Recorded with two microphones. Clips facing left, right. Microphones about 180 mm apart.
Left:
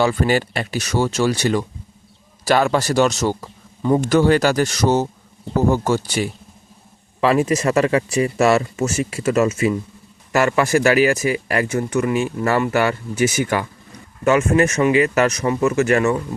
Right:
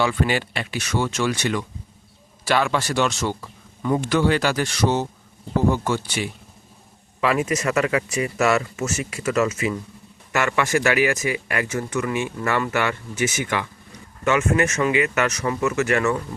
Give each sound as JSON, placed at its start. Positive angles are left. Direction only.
{"t": 0.0, "sound": "a man's voice", "side_deg": 40}